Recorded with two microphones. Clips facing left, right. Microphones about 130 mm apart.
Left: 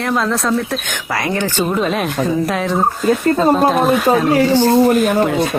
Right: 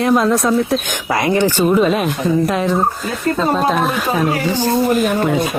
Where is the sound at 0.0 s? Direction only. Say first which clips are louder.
Right 4 dB; 15° right (ahead or behind).